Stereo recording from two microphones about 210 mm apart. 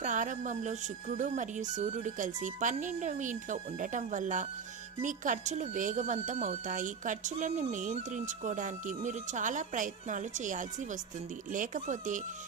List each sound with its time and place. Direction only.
0.0 s speech: 35° right (ahead or behind)